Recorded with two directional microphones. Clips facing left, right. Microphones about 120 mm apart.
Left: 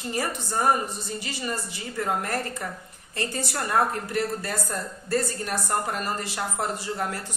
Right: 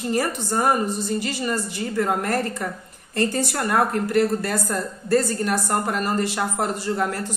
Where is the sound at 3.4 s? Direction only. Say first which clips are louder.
Right 3 dB; 55° right (ahead or behind).